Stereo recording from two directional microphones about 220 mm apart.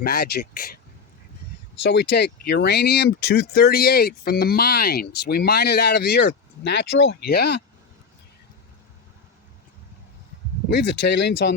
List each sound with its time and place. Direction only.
0.0 s speech: 45° left (ahead or behind)
1.8 s speech: 50° left (ahead or behind)
10.7 s speech: 50° left (ahead or behind)